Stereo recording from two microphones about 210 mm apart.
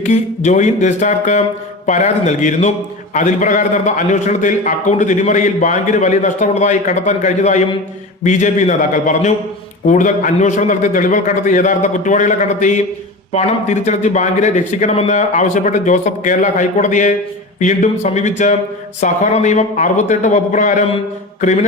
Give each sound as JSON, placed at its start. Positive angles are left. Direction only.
{"t": 0.1, "sound": "a man's voice", "side_deg": 35}